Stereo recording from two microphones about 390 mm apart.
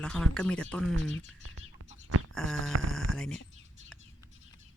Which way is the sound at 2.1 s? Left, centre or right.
Right.